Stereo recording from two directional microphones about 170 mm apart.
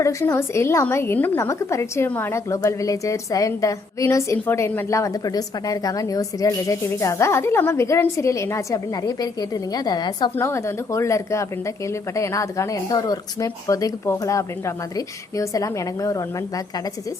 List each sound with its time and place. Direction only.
0.0 s a woman's voice: 15° left (ahead or behind)